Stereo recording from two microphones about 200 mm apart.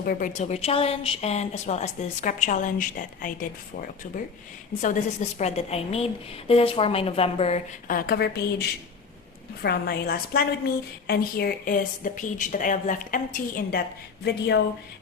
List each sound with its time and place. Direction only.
0.0 s a woman's voice: 45° left (ahead or behind)
4.8 s a woman's voice: 40° left (ahead or behind)
7.9 s speech: 45° left (ahead or behind)
14.3 s speech: 60° left (ahead or behind)